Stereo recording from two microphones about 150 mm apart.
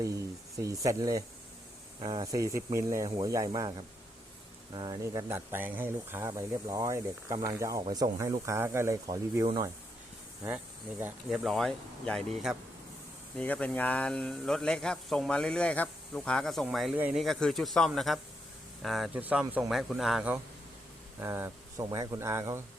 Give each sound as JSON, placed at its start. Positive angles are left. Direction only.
{"t": 0.0, "sound": "speech", "side_deg": -20}
{"t": 11.3, "sound": "speech", "side_deg": 0}
{"t": 13.3, "sound": "speech", "side_deg": 10}
{"t": 21.2, "sound": "speech", "side_deg": -15}